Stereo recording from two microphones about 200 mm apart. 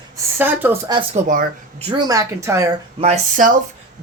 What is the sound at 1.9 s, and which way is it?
Speech, 20° right (ahead or behind).